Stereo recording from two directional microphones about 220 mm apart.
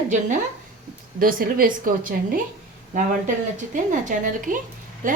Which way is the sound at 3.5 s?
35° right (ahead or behind).